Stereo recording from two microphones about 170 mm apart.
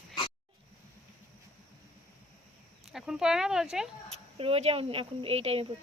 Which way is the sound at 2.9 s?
Centre (ahead or behind).